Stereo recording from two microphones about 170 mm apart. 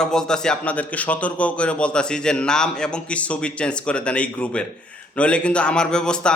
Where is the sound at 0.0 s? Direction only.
5° left (ahead or behind).